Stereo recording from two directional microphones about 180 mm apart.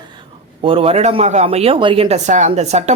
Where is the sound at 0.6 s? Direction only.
30° right (ahead or behind).